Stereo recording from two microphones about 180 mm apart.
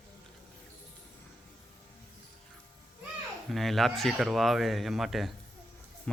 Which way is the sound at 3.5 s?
Centre (ahead or behind).